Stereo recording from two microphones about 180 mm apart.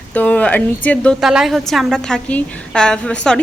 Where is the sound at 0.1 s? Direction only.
10° left (ahead or behind).